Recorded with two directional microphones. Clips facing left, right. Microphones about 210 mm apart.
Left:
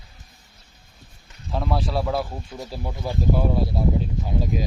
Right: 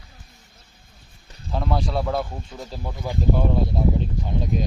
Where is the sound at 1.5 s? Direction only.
Centre (ahead or behind).